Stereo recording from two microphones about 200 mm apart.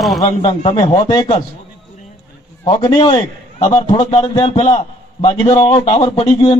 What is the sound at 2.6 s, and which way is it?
Speech, 25° left (ahead or behind).